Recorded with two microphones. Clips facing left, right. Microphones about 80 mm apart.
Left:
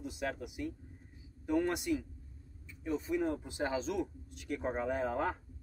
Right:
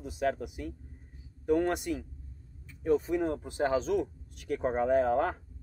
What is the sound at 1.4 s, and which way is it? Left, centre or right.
Speech, right.